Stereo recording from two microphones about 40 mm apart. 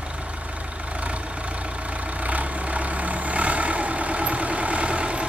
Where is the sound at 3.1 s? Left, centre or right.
Right.